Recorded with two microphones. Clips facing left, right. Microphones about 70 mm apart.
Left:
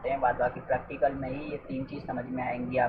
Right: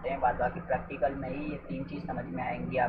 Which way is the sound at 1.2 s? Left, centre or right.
Left.